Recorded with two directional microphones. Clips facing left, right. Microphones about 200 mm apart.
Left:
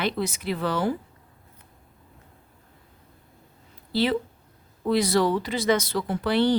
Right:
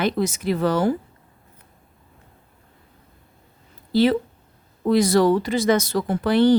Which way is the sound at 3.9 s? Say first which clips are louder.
Right 6 dB; 45° right (ahead or behind).